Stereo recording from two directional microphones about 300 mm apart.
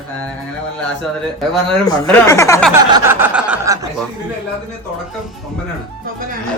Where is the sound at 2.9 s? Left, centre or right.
Centre.